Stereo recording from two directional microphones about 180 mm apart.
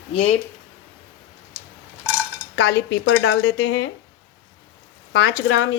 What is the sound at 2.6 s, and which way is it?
Speech, 80° left.